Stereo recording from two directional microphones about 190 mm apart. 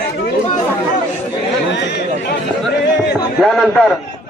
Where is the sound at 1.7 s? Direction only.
60° left (ahead or behind).